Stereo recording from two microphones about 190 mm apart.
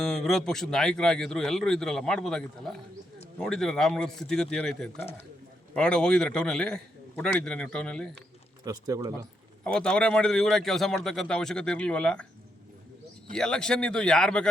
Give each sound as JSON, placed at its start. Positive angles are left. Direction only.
{"t": 0.0, "sound": "a man's voice", "side_deg": 0}
{"t": 8.6, "sound": "speech", "side_deg": -20}
{"t": 9.6, "sound": "a man's voice", "side_deg": 5}
{"t": 13.3, "sound": "a man's voice", "side_deg": 5}